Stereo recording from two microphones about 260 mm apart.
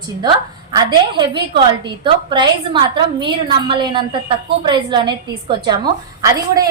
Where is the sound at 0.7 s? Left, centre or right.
Centre.